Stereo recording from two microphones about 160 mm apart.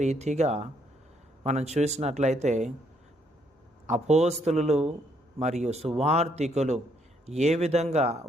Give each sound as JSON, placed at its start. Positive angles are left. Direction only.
{"t": 0.0, "sound": "speech", "side_deg": -45}
{"t": 3.8, "sound": "speech", "side_deg": -45}